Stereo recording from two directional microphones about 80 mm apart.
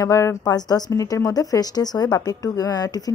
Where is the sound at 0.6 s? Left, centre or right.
Left.